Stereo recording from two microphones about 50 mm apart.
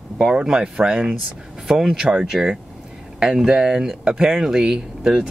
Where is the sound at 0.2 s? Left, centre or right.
Centre.